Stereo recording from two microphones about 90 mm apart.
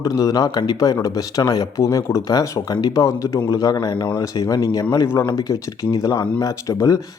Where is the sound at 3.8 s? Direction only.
60° left (ahead or behind).